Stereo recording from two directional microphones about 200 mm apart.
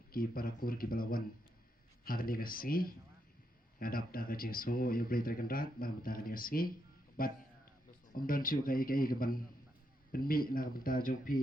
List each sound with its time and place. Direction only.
0.1 s speech: 45° left (ahead or behind)
7.2 s a sound: 45° left (ahead or behind)
8.1 s speech: 45° left (ahead or behind)